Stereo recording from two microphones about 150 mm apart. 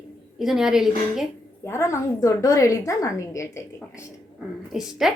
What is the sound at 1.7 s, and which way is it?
A woman's voice, 20° left (ahead or behind).